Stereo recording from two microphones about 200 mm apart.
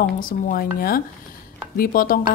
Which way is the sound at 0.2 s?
45° left (ahead or behind).